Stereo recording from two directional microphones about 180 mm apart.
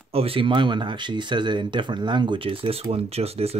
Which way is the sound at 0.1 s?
30° right (ahead or behind).